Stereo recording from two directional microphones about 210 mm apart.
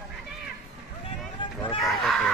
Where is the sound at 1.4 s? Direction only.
20° left (ahead or behind).